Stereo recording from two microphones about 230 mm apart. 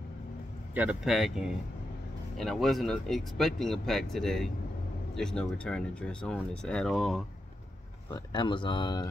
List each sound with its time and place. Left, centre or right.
0.7 s speech: centre
8.1 s speech: centre